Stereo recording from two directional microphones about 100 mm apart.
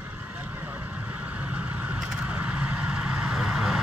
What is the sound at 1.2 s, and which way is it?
Vehicle, 15° right (ahead or behind).